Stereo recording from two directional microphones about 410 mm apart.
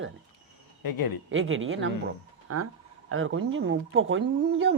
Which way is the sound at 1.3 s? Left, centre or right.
Right.